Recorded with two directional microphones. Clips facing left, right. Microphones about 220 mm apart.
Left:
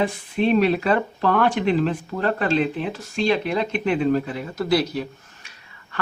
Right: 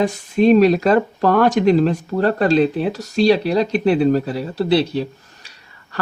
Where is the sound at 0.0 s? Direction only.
45° right (ahead or behind).